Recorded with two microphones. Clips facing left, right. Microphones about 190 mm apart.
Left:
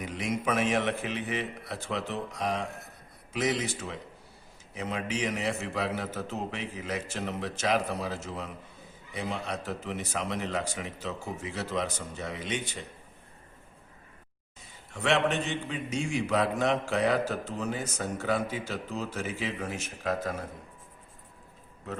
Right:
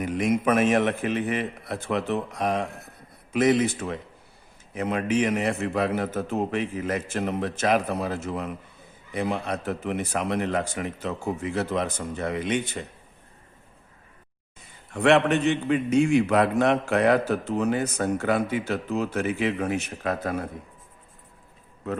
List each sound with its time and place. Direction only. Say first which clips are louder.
0.0 s a man's voice: right 8 dB; 50° right (ahead or behind)
14.9 s a man's voice: right 7 dB; 60° right (ahead or behind)